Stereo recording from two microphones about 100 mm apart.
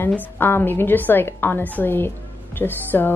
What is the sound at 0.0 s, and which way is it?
Speech, 20° left (ahead or behind).